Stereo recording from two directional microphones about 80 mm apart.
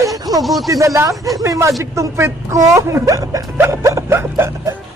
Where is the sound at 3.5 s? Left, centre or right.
Right.